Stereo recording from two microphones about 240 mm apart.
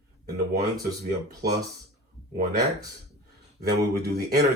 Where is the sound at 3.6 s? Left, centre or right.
Right.